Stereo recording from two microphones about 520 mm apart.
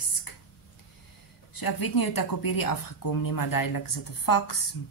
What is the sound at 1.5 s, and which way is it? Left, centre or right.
Speech, left.